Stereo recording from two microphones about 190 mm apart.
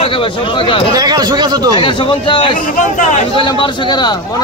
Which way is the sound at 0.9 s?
20° right (ahead or behind).